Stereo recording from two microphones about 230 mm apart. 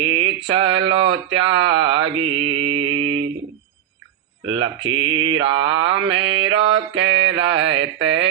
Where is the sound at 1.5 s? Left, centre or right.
Right.